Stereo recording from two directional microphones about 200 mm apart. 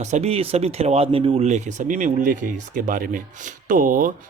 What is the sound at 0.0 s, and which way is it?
Speech, 35° right (ahead or behind).